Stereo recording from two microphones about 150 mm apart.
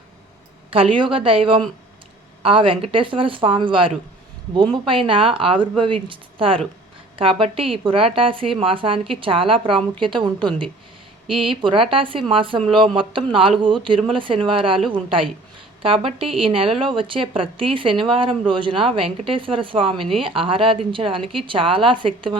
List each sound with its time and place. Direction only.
0.7 s speech: 35° right (ahead or behind)